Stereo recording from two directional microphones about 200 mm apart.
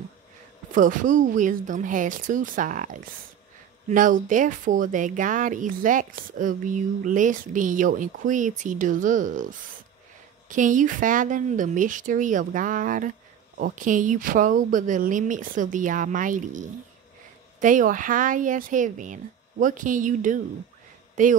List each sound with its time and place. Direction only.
0.7 s speech: 40° right (ahead or behind)